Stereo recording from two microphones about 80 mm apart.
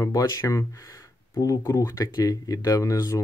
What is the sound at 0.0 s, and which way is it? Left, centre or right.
Speech, left.